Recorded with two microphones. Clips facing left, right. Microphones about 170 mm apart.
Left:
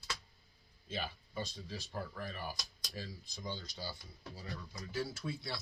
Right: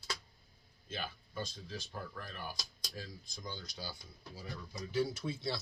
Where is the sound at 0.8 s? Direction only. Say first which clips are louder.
Left 1 dB; centre (ahead or behind).